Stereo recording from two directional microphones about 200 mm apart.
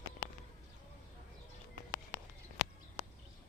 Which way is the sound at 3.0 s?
15° right (ahead or behind).